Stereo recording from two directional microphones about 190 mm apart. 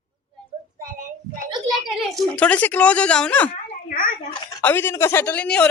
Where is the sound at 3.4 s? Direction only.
45° left (ahead or behind).